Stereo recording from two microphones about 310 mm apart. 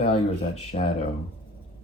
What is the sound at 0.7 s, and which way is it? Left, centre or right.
Speech, left.